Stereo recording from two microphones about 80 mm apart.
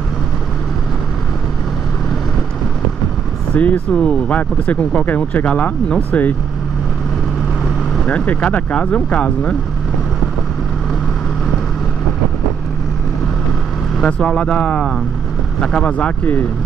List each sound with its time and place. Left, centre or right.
3.5 s speech: centre
8.0 s speech: centre
13.9 s speech: centre